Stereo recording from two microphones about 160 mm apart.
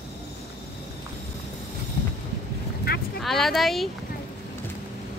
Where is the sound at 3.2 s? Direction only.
Centre (ahead or behind).